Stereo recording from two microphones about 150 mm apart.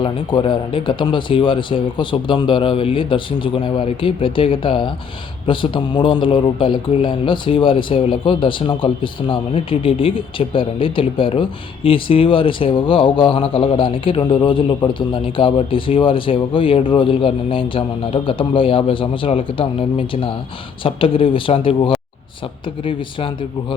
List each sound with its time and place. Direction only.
0.0 s speech: 30° left (ahead or behind)